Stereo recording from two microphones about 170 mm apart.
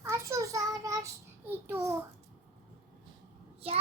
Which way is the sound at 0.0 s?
15° right (ahead or behind).